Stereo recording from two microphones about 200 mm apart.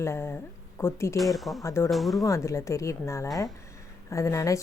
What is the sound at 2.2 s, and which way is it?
A woman's voice, 15° left (ahead or behind).